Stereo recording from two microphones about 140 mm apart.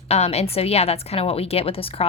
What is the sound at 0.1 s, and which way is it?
A woman's voice, 50° left (ahead or behind).